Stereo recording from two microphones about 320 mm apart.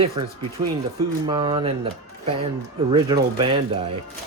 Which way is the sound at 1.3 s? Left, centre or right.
Centre.